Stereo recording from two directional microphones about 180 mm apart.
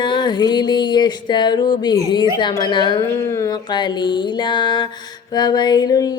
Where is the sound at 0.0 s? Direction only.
25° left (ahead or behind).